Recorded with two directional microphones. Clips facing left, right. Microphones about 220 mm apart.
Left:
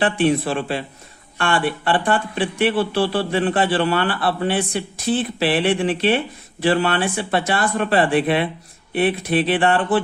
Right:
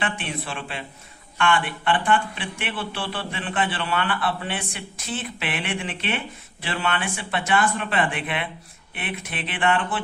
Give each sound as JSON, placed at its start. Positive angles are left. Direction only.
{"t": 0.0, "sound": "speech", "side_deg": 40}